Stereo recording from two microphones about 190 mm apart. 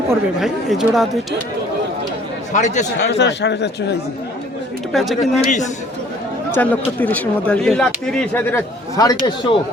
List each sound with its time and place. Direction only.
0.3 s speech: centre (ahead or behind)
2.5 s a man's voice: 40° left (ahead or behind)
3.1 s a man's voice: 65° left (ahead or behind)
4.9 s speech: centre (ahead or behind)
5.4 s a man's voice: 40° left (ahead or behind)
6.5 s speech: 10° left (ahead or behind)